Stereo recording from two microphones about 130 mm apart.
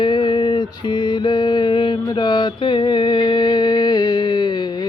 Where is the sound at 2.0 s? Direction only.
35° left (ahead or behind).